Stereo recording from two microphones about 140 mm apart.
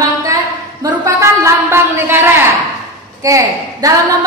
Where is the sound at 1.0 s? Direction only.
20° right (ahead or behind).